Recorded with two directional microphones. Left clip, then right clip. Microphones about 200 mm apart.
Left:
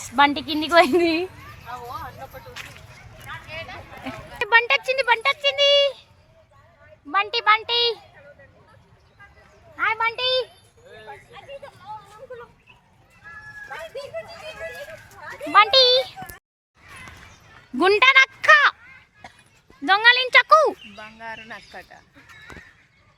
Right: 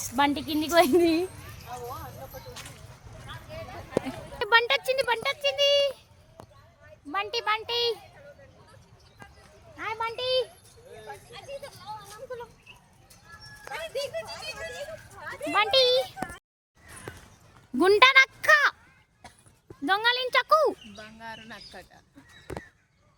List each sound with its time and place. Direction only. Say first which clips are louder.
0.0 s speech: left 7 dB; 5° left (ahead or behind)
4.0 s speech: left 4 dB; 10° right (ahead or behind); by 6.1 s 10° left (ahead or behind)
7.1 s speech: left 9 dB; 10° left (ahead or behind)
9.7 s speech: left 9 dB; 5° right (ahead or behind)
11.6 s vehicle: left 2 dB; 35° right (ahead or behind)
15.1 s a sound: left 2 dB; 40° left (ahead or behind)
15.5 s speech: left 7 dB; centre (ahead or behind)
17.7 s speech: left 3 dB; 5° right (ahead or behind)
19.8 s speech: left 9 dB; centre (ahead or behind)
20.9 s speech: left 6 dB; 30° left (ahead or behind)